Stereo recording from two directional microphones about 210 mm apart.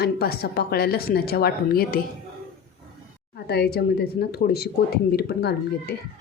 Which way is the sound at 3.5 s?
50° left (ahead or behind).